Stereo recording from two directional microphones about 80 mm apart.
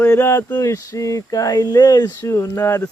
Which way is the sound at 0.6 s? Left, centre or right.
Left.